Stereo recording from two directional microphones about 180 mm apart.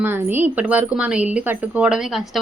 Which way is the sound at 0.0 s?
10° right (ahead or behind).